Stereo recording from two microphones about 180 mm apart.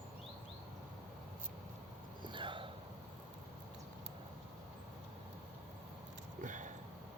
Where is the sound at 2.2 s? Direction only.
25° right (ahead or behind).